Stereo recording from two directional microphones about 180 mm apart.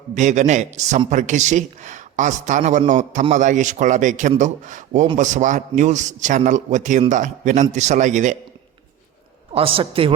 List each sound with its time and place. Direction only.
0.2 s a man's voice: 40° right (ahead or behind)
9.5 s speech: 30° right (ahead or behind)